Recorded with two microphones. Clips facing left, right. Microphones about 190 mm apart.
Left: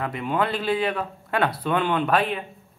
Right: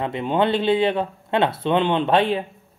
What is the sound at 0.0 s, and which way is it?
Speech, 25° right (ahead or behind).